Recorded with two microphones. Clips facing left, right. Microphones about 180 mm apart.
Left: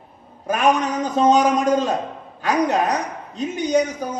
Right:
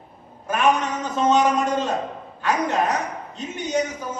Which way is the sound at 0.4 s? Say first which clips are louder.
Left 2 dB; 40° left (ahead or behind).